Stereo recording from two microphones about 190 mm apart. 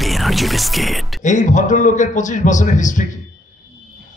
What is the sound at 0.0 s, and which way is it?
Speech, centre (ahead or behind).